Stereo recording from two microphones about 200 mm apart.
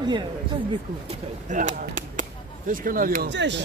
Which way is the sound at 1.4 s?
40° right (ahead or behind).